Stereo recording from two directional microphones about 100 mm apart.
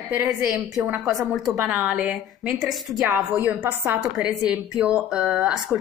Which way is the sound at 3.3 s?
20° right (ahead or behind).